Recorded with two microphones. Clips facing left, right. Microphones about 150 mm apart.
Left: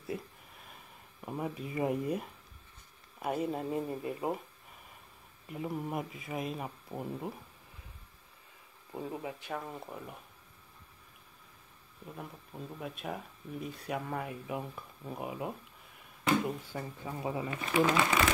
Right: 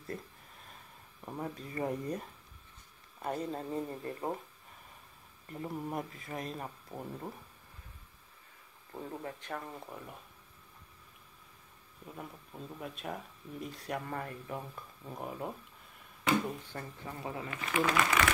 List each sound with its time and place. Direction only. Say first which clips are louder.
1.2 s speech: left 3 dB; 10° left (ahead or behind)
5.5 s speech: left 2 dB; 5° left (ahead or behind)
8.9 s speech: left 3 dB; 10° left (ahead or behind)
12.1 s speech: left 1 dB; centre (ahead or behind); by 18.2 s 25° left (ahead or behind)